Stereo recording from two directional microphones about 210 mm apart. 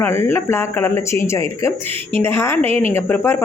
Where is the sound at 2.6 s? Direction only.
30° right (ahead or behind).